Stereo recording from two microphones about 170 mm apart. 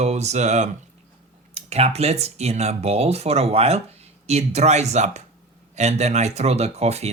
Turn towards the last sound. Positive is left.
turn(degrees=-40)  # may be behind; listen again after turning